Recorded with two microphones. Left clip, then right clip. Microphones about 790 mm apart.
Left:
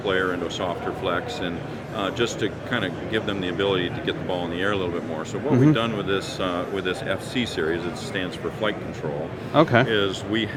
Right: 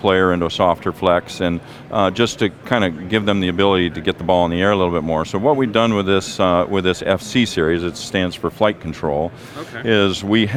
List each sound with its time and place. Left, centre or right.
0.0 s speech: right
9.9 s speech: right